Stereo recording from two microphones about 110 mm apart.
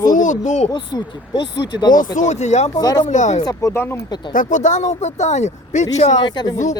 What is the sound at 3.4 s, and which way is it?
Speech, 25° left (ahead or behind).